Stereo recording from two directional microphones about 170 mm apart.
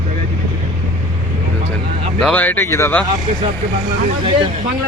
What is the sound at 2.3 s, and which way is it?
Speech, 10° left (ahead or behind).